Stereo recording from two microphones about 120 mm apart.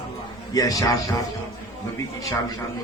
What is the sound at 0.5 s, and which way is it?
Speech, 30° left (ahead or behind).